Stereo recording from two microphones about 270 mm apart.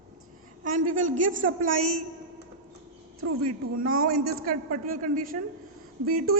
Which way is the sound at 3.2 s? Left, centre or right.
Right.